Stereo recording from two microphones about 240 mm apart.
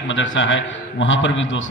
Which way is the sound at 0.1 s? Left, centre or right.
Left.